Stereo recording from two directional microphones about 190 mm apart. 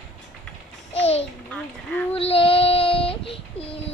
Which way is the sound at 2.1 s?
30° left (ahead or behind).